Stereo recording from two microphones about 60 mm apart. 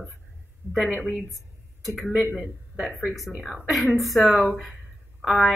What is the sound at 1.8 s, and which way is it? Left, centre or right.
Speech, centre.